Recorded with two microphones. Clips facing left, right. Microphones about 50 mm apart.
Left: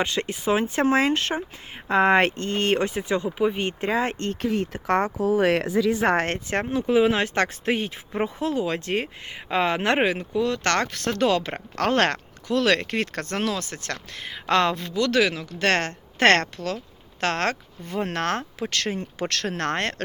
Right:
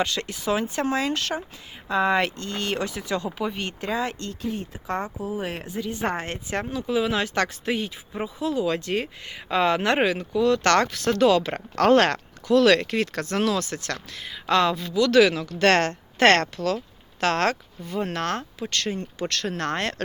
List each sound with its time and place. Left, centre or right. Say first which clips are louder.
0.0 s speech: left 1 dB; left
4.5 s speech: left 7 dB; left
5.2 s speech: left 10 dB; left
6.2 s speech: left 3 dB; left
13.3 s speech: right 4 dB; left
15.2 s speech: right 4 dB; left
17.8 s speech: left 1 dB; left